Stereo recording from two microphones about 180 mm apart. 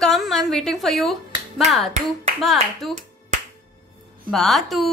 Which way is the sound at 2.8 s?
Centre (ahead or behind).